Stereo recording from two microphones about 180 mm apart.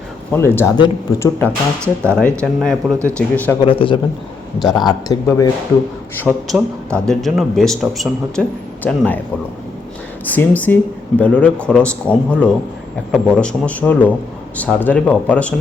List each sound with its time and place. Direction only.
0.3 s a man's voice: 15° left (ahead or behind)
3.6 s a man's voice: 30° left (ahead or behind)
6.1 s a man's voice: 5° left (ahead or behind)
10.2 s a man's voice: 10° left (ahead or behind)